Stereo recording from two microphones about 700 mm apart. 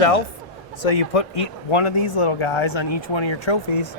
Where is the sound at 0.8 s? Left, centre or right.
Left.